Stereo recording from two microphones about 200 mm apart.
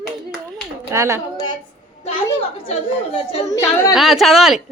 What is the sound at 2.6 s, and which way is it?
Speech, 30° left (ahead or behind).